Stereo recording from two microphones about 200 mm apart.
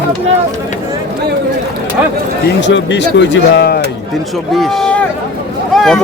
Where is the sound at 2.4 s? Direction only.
65° left (ahead or behind).